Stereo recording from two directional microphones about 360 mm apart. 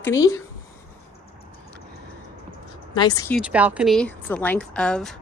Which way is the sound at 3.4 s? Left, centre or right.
Centre.